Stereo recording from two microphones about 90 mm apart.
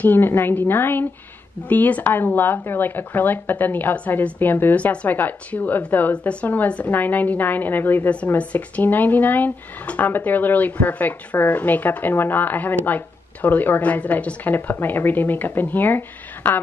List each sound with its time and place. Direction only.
0.0 s a woman's voice: 25° left (ahead or behind)